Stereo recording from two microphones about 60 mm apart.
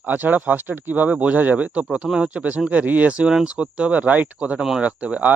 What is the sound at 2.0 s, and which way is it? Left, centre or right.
Speech, centre.